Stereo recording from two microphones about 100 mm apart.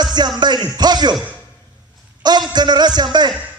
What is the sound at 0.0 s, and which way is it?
A man's voice, 45° right (ahead or behind).